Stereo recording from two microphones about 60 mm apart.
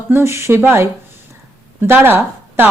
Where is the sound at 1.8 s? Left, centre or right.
Right.